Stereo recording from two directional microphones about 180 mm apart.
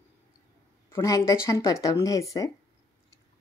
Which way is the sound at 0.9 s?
15° left (ahead or behind).